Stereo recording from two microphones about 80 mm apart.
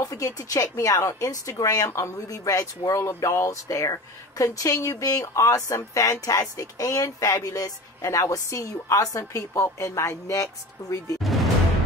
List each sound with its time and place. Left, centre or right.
0.0 s speech: left
1.9 s speech: left